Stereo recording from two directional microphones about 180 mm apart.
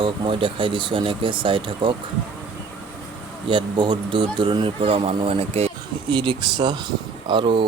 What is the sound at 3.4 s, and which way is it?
Speech, 25° right (ahead or behind).